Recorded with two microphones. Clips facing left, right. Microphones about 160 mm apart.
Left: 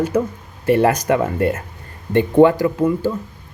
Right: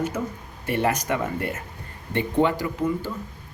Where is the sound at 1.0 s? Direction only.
70° left (ahead or behind).